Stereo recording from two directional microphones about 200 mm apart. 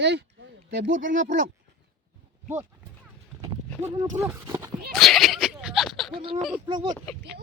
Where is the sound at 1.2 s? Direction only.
40° right (ahead or behind).